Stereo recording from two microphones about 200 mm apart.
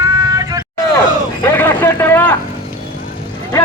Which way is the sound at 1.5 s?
10° left (ahead or behind).